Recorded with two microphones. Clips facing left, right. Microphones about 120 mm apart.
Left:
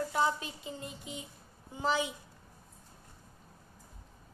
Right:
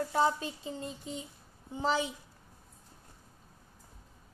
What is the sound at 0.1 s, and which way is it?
A woman's voice, 30° right (ahead or behind).